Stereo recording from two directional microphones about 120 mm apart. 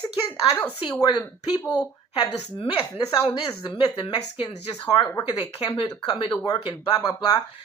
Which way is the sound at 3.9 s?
40° left (ahead or behind).